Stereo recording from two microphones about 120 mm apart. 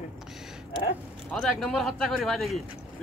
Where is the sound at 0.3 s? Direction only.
5° right (ahead or behind).